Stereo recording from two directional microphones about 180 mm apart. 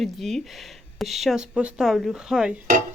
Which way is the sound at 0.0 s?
Centre (ahead or behind).